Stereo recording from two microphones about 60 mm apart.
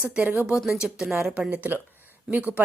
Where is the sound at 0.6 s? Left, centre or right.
Centre.